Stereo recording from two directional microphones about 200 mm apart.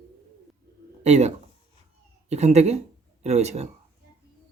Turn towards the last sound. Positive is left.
turn(degrees=-35)  # may be behind; listen again after turning